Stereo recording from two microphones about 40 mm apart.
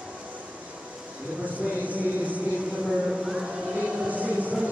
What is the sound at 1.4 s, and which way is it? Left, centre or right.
Speech, right.